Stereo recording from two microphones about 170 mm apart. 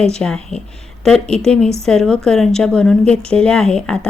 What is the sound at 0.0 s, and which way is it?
Speech, 5° left (ahead or behind).